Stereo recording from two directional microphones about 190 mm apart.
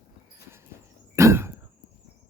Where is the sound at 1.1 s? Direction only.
15° right (ahead or behind).